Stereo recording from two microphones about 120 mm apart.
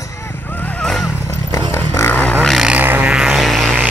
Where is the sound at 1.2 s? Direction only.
25° left (ahead or behind); by 2.7 s 5° left (ahead or behind).